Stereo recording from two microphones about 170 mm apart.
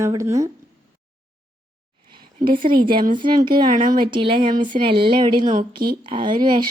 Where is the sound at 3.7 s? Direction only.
50° right (ahead or behind).